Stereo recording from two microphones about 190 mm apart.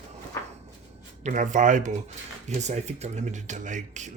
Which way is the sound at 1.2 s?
40° right (ahead or behind).